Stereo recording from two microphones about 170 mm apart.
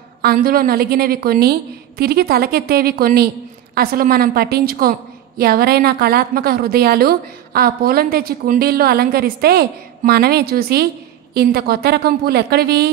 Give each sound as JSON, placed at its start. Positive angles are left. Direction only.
{"t": 0.2, "sound": "a woman's voice", "side_deg": -65}